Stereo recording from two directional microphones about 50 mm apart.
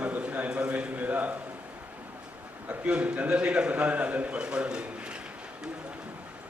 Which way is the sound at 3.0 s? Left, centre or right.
Right.